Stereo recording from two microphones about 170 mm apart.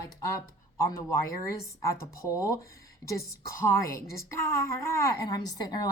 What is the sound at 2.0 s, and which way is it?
A woman's voice, 20° left (ahead or behind).